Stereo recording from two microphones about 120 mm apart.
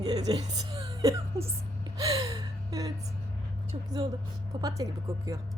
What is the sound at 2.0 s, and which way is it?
Gasp, 30° right (ahead or behind).